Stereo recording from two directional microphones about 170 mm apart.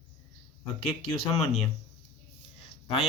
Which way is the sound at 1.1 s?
35° left (ahead or behind).